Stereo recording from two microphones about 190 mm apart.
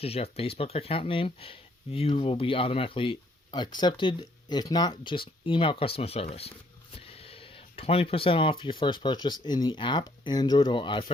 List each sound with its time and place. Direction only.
0.0 s speech: 30° left (ahead or behind)